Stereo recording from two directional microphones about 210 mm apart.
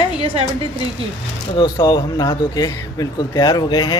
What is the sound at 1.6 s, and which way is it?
Speech, 20° left (ahead or behind).